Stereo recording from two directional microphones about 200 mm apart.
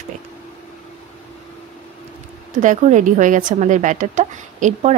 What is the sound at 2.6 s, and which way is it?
Speech, 35° right (ahead or behind).